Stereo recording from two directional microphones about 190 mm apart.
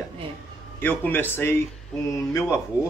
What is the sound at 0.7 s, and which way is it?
Speech, 10° left (ahead or behind).